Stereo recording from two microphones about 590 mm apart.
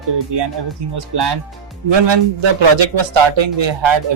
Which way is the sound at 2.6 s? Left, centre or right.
Right.